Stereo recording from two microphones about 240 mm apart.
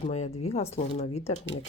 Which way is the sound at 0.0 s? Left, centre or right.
Left.